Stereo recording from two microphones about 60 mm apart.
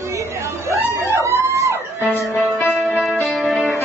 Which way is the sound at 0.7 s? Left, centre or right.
Right.